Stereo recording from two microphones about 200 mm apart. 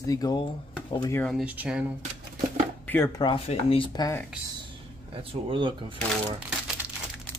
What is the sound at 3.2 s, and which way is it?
Speech, 25° left (ahead or behind).